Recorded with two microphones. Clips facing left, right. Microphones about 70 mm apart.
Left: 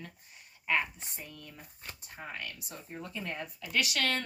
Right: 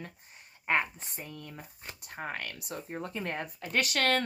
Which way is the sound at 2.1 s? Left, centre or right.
Right.